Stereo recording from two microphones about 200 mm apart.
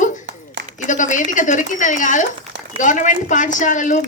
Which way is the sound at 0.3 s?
60° right (ahead or behind).